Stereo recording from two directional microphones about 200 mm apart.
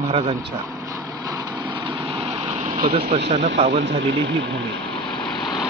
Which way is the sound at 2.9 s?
30° right (ahead or behind).